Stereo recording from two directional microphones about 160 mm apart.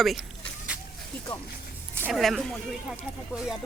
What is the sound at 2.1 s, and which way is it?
Speech, centre (ahead or behind).